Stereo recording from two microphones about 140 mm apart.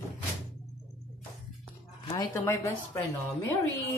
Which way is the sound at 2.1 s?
25° left (ahead or behind).